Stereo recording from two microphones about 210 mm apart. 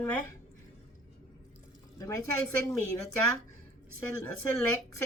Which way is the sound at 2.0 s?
15° left (ahead or behind).